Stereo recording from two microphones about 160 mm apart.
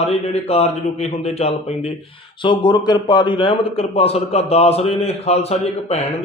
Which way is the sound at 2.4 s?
30° left (ahead or behind).